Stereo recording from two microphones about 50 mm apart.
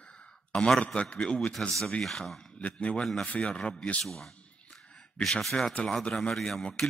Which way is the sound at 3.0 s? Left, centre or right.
Centre.